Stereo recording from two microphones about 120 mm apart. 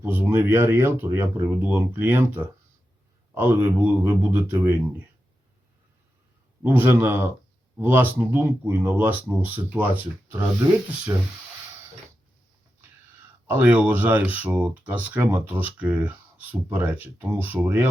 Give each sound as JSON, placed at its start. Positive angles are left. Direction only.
{"t": 0.0, "sound": "speech", "side_deg": -15}
{"t": 6.6, "sound": "speech", "side_deg": -15}
{"t": 13.5, "sound": "speech", "side_deg": -15}